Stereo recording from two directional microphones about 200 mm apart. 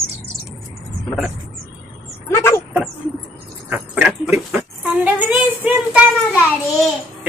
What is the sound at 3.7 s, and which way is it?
Speech, 10° right (ahead or behind).